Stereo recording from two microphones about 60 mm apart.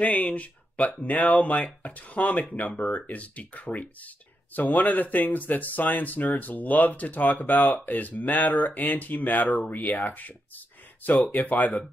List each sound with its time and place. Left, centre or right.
0.0 s speech: left
11.3 s speech: left